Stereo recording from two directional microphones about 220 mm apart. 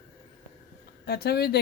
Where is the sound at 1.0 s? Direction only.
45° left (ahead or behind).